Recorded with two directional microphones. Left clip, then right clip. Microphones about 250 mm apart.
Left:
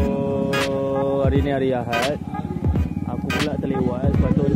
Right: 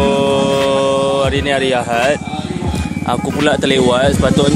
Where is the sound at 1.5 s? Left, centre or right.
Centre.